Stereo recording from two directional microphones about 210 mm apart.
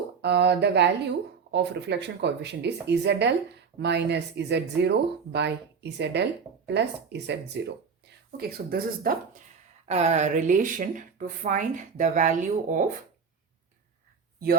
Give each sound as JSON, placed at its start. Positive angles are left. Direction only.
{"t": 0.2, "sound": "speech", "side_deg": -55}
{"t": 9.8, "sound": "speech", "side_deg": -30}